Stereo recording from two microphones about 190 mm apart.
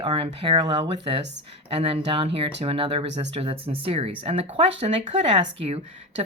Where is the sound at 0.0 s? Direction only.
25° right (ahead or behind).